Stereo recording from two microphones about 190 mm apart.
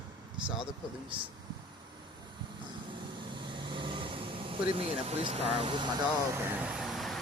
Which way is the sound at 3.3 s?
25° right (ahead or behind).